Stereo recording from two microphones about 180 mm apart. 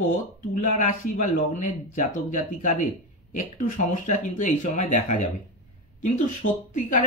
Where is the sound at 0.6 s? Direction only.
45° left (ahead or behind).